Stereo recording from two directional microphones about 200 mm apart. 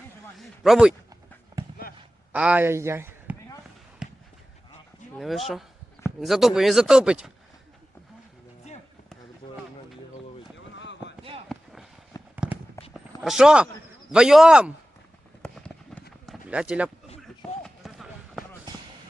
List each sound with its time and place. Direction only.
0.3 s speech: centre (ahead or behind)
1.5 s basketball bounce: 20° right (ahead or behind)
2.3 s speech: 5° right (ahead or behind)
5.1 s speech: centre (ahead or behind)
11.0 s a sound: 25° right (ahead or behind)
11.4 s basketball bounce: centre (ahead or behind)
12.1 s fireworks: 20° left (ahead or behind)
12.9 s a sound: centre (ahead or behind)
14.1 s speech: 5° right (ahead or behind)
15.4 s fireworks: 5° left (ahead or behind)
16.2 s run: 5° right (ahead or behind)
17.2 s basketball bounce: centre (ahead or behind)